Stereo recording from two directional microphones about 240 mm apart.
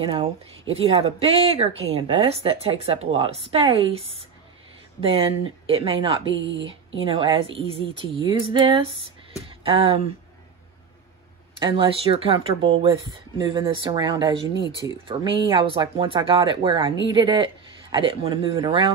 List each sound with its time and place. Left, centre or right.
0.0 s speech: right
6.3 s speech: right
7.0 s speech: right
9.5 s a sound: right
11.6 s speech: right